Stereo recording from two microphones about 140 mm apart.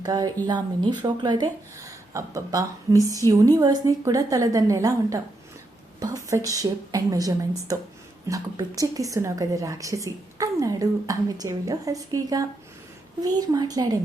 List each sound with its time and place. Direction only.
0.0 s a woman's voice: 30° right (ahead or behind)
6.3 s speech: 25° right (ahead or behind)